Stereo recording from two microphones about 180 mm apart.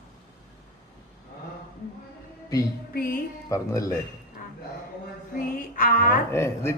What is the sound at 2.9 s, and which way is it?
Music, 55° left (ahead or behind).